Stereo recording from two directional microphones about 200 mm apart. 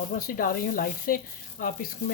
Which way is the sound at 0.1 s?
45° left (ahead or behind).